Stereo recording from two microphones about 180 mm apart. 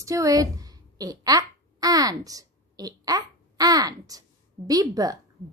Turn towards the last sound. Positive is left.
turn(degrees=-20)  # may be behind; listen again after turning